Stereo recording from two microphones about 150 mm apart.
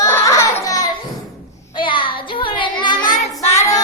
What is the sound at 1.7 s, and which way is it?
Child singing, 35° left (ahead or behind).